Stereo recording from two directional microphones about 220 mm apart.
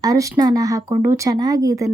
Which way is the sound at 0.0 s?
15° right (ahead or behind).